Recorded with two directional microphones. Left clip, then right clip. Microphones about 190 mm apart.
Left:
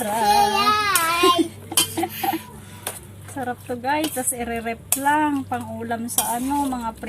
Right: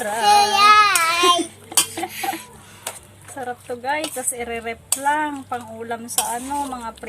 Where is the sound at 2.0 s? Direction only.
25° right (ahead or behind).